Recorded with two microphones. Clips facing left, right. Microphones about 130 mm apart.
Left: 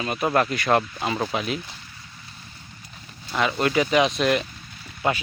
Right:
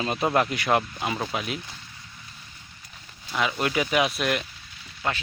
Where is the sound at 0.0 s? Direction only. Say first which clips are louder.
Even; 25° right (ahead or behind).